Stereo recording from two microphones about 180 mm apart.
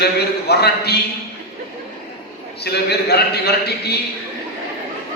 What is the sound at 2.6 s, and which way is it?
A man's voice, 65° left (ahead or behind).